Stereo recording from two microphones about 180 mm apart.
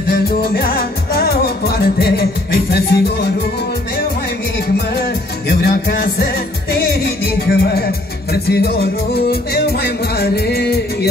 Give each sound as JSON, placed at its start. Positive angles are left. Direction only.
{"t": 0.1, "sound": "music", "side_deg": 60}
{"t": 5.5, "sound": "music", "side_deg": 60}
{"t": 7.4, "sound": "music", "side_deg": 60}